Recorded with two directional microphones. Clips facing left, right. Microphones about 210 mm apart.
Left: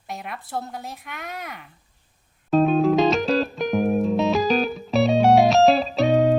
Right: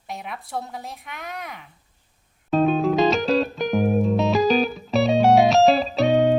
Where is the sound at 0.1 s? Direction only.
Centre (ahead or behind).